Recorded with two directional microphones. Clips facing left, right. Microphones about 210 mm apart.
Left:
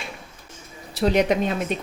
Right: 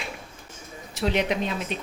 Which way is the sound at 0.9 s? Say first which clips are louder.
Left 5 dB; 40° left (ahead or behind).